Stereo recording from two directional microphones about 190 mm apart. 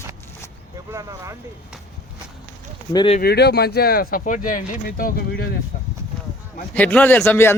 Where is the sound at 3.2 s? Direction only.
60° left (ahead or behind).